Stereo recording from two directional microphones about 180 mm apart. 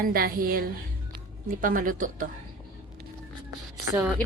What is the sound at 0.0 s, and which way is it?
Speech, 55° right (ahead or behind).